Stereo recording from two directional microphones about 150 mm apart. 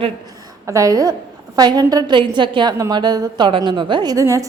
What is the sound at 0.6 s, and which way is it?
A woman's voice, 20° right (ahead or behind).